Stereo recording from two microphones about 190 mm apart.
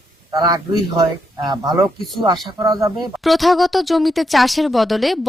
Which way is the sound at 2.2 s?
20° right (ahead or behind).